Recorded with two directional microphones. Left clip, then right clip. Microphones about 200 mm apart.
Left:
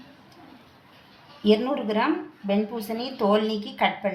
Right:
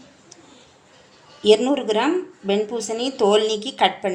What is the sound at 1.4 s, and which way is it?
Speech, 35° right (ahead or behind).